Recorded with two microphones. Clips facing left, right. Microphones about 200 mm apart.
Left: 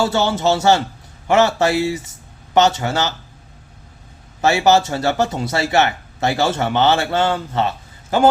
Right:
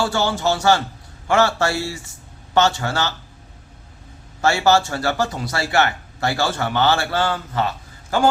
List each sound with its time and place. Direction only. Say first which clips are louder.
0.0 s speech: left 3 dB; 20° left (ahead or behind)
4.4 s speech: left 2 dB; 20° left (ahead or behind)